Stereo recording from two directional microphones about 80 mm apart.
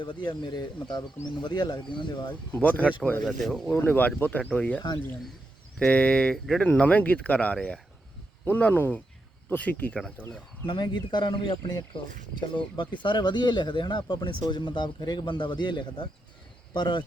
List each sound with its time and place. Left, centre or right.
0.0 s speech: left
2.5 s speech: centre
3.2 s speech: centre
3.8 s speech: centre
5.8 s speech: centre
6.7 s speech: centre
8.4 s speech: left
10.7 s a man's voice: left